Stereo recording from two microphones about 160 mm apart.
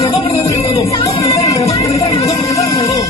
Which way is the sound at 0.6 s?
20° left (ahead or behind).